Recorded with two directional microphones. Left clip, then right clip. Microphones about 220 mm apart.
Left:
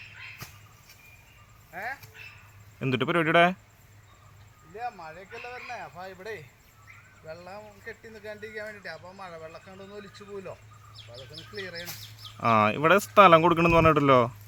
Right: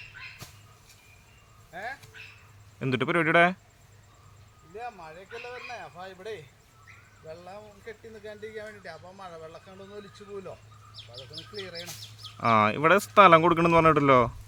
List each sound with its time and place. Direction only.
1.7 s speech: 5° left (ahead or behind)
4.7 s speech: 5° left (ahead or behind)
11.4 s speech: 45° right (ahead or behind)
12.4 s speech: centre (ahead or behind)